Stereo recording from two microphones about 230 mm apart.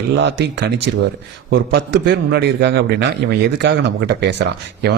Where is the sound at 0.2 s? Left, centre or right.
Right.